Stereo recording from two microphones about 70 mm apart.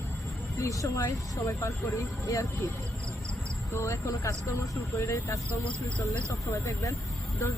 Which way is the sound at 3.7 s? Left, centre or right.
Left.